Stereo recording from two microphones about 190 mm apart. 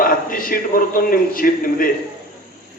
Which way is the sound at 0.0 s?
45° left (ahead or behind).